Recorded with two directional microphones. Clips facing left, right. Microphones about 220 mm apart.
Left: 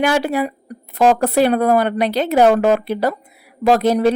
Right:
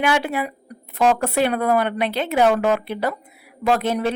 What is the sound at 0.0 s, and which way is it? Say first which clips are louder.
Speech: left 4 dB; 40° left (ahead or behind).